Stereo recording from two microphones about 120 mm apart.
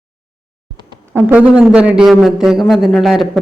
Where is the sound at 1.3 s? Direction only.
10° right (ahead or behind).